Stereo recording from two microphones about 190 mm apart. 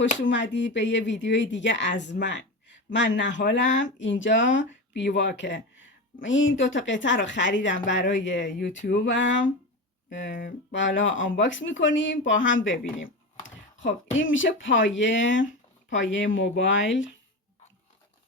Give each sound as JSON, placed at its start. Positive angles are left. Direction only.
{"t": 0.2, "sound": "speech", "side_deg": 75}
{"t": 6.2, "sound": "speech", "side_deg": 80}
{"t": 12.6, "sound": "a sound", "side_deg": 80}
{"t": 14.2, "sound": "speech", "side_deg": 90}